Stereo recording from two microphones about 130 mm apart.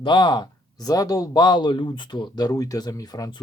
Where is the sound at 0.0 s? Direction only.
35° left (ahead or behind).